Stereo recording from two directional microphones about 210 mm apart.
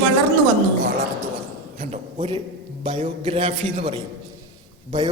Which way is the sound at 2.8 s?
30° right (ahead or behind).